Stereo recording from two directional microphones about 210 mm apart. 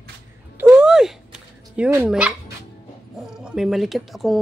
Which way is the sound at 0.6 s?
5° right (ahead or behind).